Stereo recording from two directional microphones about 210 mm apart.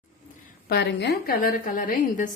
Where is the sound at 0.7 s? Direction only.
50° left (ahead or behind).